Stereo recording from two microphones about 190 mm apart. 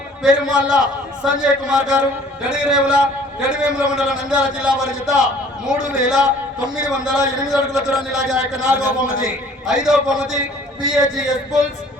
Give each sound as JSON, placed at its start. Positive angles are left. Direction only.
{"t": 0.2, "sound": "a man's voice", "side_deg": -5}
{"t": 8.9, "sound": "a man's voice", "side_deg": 50}
{"t": 9.2, "sound": "a man's voice", "side_deg": -5}